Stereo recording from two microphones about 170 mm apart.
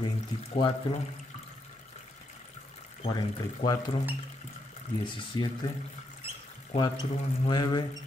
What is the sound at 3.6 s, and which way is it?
Speech, 25° left (ahead or behind).